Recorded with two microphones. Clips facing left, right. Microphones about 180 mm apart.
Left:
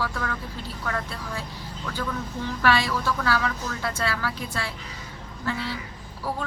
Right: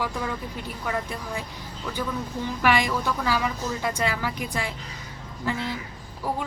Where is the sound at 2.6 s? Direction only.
15° right (ahead or behind).